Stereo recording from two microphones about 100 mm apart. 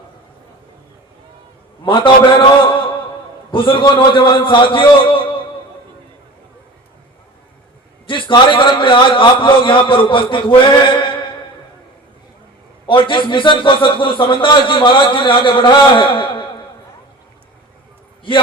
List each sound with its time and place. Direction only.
1.8 s a man's voice: 55° left (ahead or behind)
8.0 s a man's voice: 60° left (ahead or behind)
12.9 s a man's voice: 55° left (ahead or behind)